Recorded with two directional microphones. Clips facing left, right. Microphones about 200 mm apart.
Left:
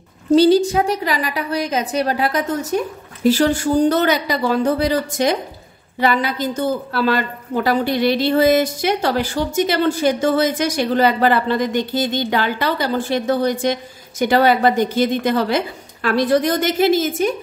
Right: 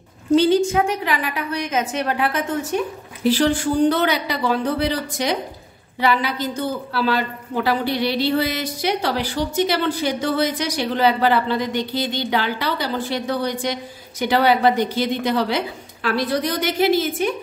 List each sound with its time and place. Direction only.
0.3 s a woman's voice: 35° left (ahead or behind)